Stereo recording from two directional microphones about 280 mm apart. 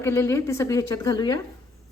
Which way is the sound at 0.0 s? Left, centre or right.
Centre.